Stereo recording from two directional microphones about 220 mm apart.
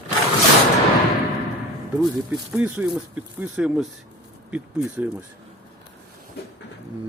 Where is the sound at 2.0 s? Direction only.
5° right (ahead or behind).